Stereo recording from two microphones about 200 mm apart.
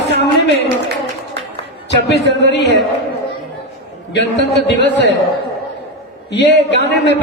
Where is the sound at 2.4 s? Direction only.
60° left (ahead or behind).